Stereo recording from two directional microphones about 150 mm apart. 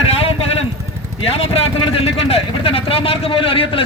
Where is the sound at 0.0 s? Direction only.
40° left (ahead or behind).